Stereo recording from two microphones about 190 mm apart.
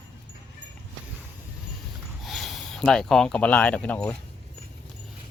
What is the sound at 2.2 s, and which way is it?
Speech, centre (ahead or behind).